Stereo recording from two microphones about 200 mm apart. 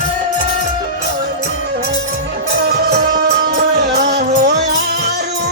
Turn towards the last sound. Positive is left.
turn(degrees=-40)  # may be behind; listen again after turning